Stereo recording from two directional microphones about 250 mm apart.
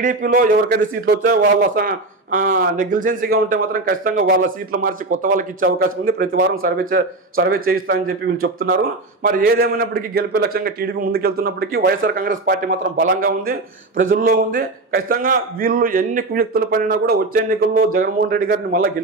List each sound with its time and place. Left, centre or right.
0.0 s a man's voice: right